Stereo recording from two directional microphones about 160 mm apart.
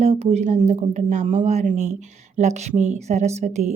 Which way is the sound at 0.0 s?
40° right (ahead or behind).